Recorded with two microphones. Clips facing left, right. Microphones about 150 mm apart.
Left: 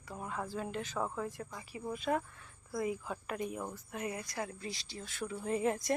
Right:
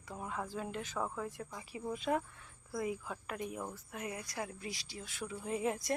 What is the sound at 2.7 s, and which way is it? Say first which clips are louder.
Speech: left 2 dB; centre (ahead or behind).